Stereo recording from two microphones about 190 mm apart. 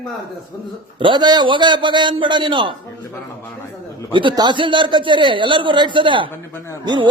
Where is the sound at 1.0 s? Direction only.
25° right (ahead or behind).